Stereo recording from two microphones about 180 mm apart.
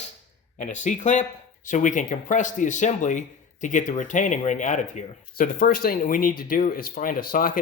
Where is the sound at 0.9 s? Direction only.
45° left (ahead or behind).